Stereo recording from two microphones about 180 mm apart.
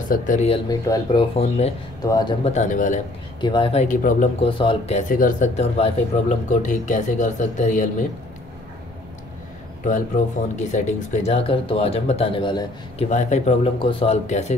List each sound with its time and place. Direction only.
0.1 s speech: 45° left (ahead or behind)
0.7 s speech: 20° left (ahead or behind)
1.3 s speech: 35° left (ahead or behind)
2.0 s speech: 20° left (ahead or behind)
2.4 s speech: 40° left (ahead or behind)
3.3 s speech: 25° left (ahead or behind)
3.8 s speech: 45° left (ahead or behind)
4.4 s speech: 30° left (ahead or behind)
9.8 s speech: 45° left (ahead or behind); by 13.1 s 25° left (ahead or behind)
13.1 s speech: 40° left (ahead or behind)